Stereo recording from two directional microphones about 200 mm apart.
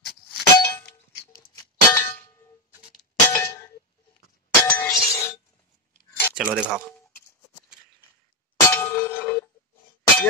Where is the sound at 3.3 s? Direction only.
15° left (ahead or behind).